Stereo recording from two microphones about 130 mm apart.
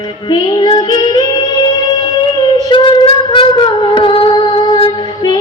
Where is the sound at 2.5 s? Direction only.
35° left (ahead or behind).